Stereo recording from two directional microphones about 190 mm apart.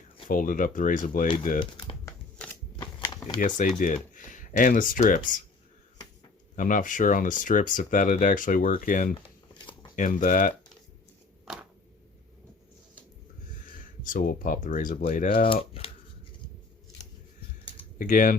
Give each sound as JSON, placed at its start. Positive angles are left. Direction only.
{"t": 0.3, "sound": "speech", "side_deg": 45}
{"t": 1.5, "sound": "speech", "side_deg": 25}
{"t": 2.7, "sound": "shuffling cards", "side_deg": 25}
{"t": 3.8, "sound": "speech", "side_deg": 45}
{"t": 6.6, "sound": "speech", "side_deg": 45}
{"t": 9.6, "sound": "a sound", "side_deg": 25}
{"t": 9.9, "sound": "speech", "side_deg": 45}
{"t": 11.5, "sound": "a sound", "side_deg": -5}
{"t": 13.7, "sound": "speech", "side_deg": 45}
{"t": 17.9, "sound": "speech", "side_deg": 45}